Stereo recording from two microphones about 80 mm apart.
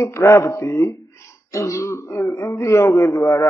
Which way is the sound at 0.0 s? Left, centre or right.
Left.